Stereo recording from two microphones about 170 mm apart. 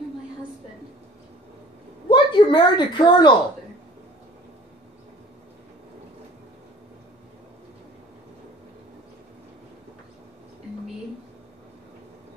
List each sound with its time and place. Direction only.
2.0 s a woman's voice: 30° left (ahead or behind)